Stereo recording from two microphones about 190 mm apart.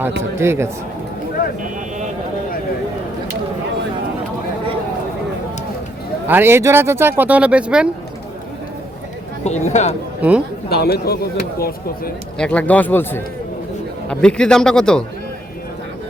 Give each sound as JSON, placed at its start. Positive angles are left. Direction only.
{"t": 0.2, "sound": "speech", "side_deg": -15}
{"t": 6.2, "sound": "speech", "side_deg": -10}
{"t": 9.4, "sound": "speech", "side_deg": 35}
{"t": 10.2, "sound": "a man's voice", "side_deg": -10}
{"t": 10.7, "sound": "speech", "side_deg": 55}
{"t": 12.4, "sound": "speech", "side_deg": 5}